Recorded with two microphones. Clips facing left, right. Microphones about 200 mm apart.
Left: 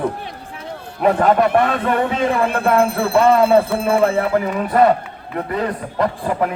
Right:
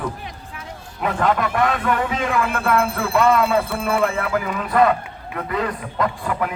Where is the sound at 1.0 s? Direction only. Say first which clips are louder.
Left 6 dB; 35° left (ahead or behind).